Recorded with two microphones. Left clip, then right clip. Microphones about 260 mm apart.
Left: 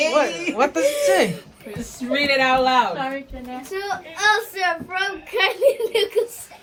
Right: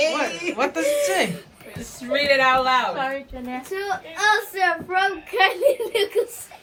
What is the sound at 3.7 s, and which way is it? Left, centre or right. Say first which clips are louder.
A child's voice: left 1 dB; centre.